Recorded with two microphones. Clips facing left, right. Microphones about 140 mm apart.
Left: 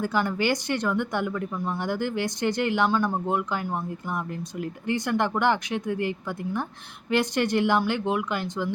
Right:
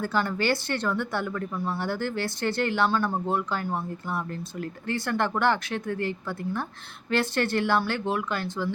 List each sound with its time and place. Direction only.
0.0 s speech: 15° left (ahead or behind)